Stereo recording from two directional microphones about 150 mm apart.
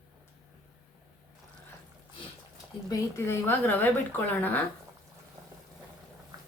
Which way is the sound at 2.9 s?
20° left (ahead or behind).